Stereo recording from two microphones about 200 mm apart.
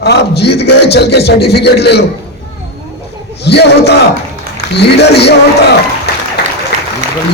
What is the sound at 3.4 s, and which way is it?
A man's voice, 55° left (ahead or behind).